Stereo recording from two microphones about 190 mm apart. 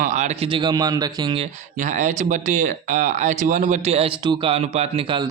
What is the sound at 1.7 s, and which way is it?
Speech, 40° right (ahead or behind).